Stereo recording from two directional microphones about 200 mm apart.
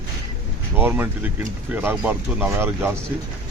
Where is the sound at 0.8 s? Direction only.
10° right (ahead or behind).